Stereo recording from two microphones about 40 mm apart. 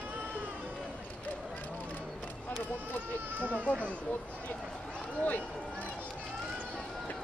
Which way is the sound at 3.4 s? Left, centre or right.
Right.